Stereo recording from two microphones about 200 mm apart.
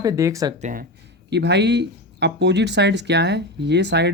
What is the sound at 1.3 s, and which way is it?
Speech, 60° right (ahead or behind).